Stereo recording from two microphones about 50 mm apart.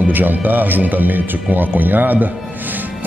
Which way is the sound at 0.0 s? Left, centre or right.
Right.